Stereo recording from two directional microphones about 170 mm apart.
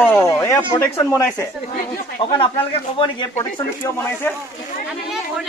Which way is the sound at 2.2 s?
30° left (ahead or behind).